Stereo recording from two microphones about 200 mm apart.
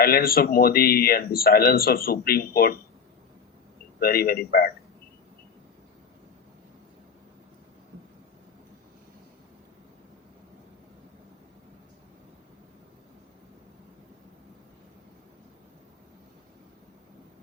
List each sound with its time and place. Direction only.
0.0 s speech: 50° left (ahead or behind)
4.0 s speech: 50° left (ahead or behind)